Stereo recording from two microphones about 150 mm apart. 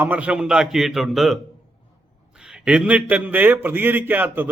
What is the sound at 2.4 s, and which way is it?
A man's voice, 5° right (ahead or behind).